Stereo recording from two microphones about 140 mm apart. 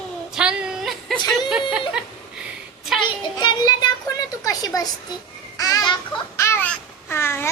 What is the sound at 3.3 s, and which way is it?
A child's voice, 30° left (ahead or behind).